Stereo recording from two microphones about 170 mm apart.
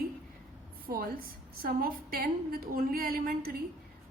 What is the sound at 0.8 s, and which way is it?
A woman's voice, 60° right (ahead or behind).